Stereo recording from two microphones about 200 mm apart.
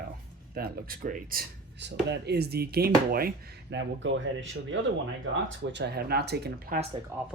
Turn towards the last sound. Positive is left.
turn(degrees=-10)  # may be behind; listen again after turning